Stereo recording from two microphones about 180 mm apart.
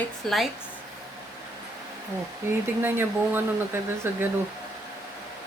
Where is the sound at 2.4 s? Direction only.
15° right (ahead or behind).